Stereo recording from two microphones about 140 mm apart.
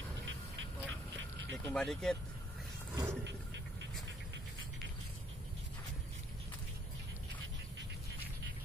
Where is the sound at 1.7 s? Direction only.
5° left (ahead or behind).